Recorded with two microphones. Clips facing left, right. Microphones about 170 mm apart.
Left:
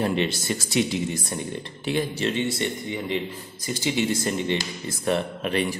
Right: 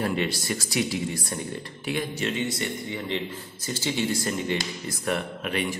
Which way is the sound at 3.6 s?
15° left (ahead or behind).